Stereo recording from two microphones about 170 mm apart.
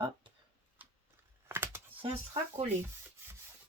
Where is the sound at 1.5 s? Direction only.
15° right (ahead or behind).